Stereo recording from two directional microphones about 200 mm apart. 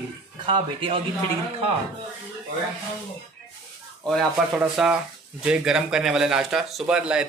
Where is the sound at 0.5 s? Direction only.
25° right (ahead or behind).